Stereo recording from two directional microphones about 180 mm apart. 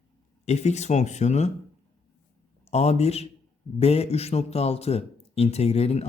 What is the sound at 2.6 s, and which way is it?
Speech, 35° left (ahead or behind).